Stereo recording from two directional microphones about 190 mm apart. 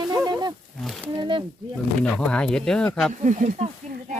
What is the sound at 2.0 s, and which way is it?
Speech, 5° left (ahead or behind).